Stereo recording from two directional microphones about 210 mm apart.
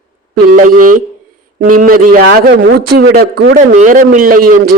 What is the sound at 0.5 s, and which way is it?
A man's voice, 40° right (ahead or behind).